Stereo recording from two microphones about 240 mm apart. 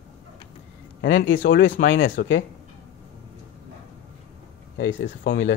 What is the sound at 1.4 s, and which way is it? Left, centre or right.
Speech, left.